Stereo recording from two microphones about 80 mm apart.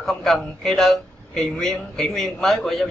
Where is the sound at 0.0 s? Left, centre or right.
Centre.